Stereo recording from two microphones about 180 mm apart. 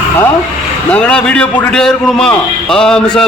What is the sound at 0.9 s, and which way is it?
A man's voice, 5° left (ahead or behind).